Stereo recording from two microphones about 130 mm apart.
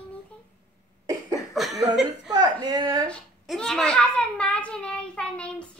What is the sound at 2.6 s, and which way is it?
Speech, 30° right (ahead or behind).